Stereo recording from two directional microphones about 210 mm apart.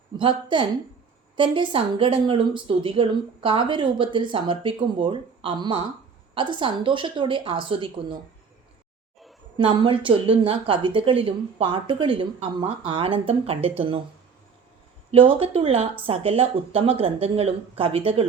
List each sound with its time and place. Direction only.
0.2 s a woman's voice: 25° right (ahead or behind)
9.6 s a woman's voice: 25° right (ahead or behind)
15.1 s a woman's voice: 25° right (ahead or behind)